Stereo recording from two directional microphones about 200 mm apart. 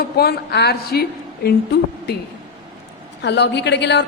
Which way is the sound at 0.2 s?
55° left (ahead or behind).